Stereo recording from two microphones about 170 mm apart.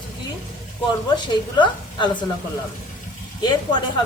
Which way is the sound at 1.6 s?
30° left (ahead or behind).